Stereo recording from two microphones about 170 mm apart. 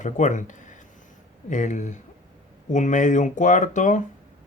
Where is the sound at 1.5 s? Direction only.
45° left (ahead or behind).